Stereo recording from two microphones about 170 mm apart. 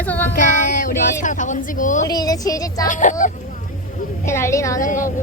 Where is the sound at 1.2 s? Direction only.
50° left (ahead or behind).